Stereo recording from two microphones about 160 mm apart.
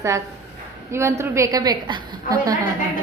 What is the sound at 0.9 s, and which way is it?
A woman's voice, 15° right (ahead or behind).